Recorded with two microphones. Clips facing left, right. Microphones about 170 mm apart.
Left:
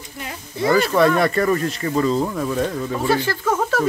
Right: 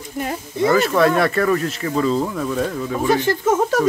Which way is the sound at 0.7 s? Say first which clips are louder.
Even; centre (ahead or behind).